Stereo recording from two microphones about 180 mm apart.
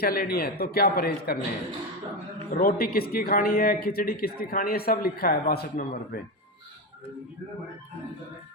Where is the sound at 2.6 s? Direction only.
55° left (ahead or behind).